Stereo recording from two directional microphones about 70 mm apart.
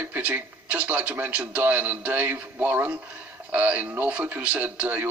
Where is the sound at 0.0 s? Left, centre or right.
Right.